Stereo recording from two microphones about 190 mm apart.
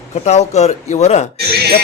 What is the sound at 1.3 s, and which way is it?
Speech, 55° right (ahead or behind).